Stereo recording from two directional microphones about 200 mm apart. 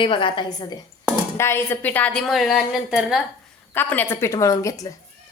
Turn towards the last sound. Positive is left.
turn(degrees=15)  # may be behind; listen again after turning